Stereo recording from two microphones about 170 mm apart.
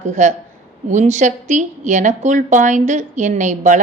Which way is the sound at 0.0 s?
45° right (ahead or behind).